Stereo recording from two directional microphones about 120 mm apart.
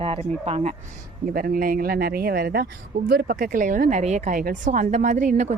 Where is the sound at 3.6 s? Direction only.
90° right.